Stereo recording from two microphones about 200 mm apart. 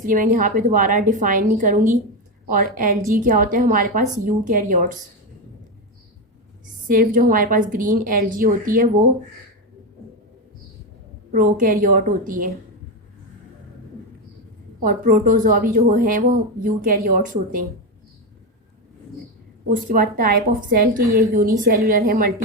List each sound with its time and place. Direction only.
0.0 s a woman's voice: 45° right (ahead or behind)
6.8 s a woman's voice: 45° right (ahead or behind)
11.3 s a woman's voice: 45° right (ahead or behind)
14.8 s a woman's voice: 45° right (ahead or behind)
19.6 s a woman's voice: 45° right (ahead or behind)